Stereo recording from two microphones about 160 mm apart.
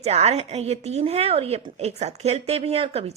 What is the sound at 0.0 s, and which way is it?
A woman's voice, 40° right (ahead or behind).